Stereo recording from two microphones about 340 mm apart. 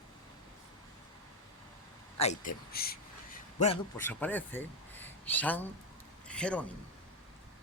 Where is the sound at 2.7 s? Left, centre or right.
Left.